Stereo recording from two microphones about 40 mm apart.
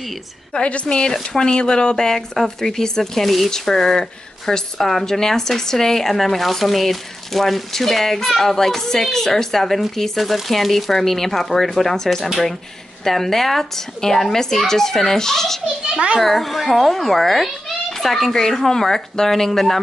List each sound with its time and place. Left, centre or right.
0.5 s a child's voice: left; by 19.8 s centre